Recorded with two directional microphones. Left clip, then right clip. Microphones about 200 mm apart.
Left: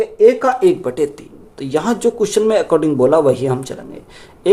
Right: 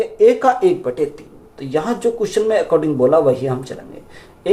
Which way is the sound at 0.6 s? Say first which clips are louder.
Left 2 dB; 40° left (ahead or behind).